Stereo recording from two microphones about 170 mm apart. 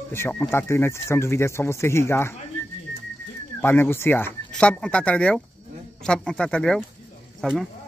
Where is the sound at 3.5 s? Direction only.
10° left (ahead or behind).